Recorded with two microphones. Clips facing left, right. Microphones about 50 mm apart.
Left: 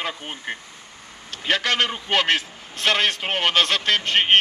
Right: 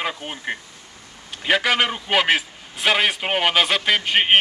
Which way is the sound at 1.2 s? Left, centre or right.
Centre.